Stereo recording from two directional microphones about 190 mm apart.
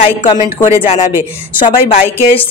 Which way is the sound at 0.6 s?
40° left (ahead or behind).